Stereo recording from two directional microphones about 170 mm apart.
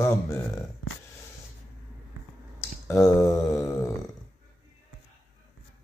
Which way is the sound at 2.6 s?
15° left (ahead or behind).